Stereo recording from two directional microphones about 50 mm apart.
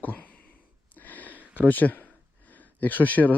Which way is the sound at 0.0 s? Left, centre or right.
Left.